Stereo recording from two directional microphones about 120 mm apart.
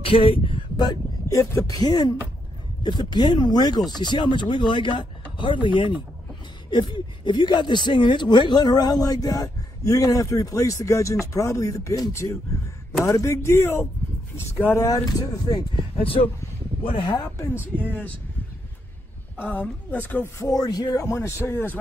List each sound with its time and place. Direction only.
0.0 s speech: 50° left (ahead or behind); by 14.9 s 20° left (ahead or behind)
14.9 s speech: 30° left (ahead or behind)
16.0 s speech: 50° left (ahead or behind)
17.9 s speech: 10° left (ahead or behind)
19.3 s speech: 15° left (ahead or behind)
20.4 s speech: 30° left (ahead or behind)